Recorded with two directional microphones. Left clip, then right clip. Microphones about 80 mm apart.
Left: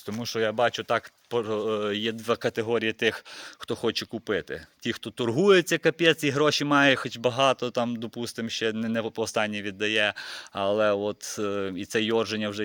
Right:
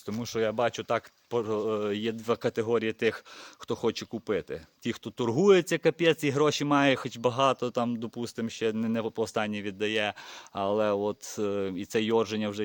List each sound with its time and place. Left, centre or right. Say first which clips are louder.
0.2 s speech: left 3 dB; right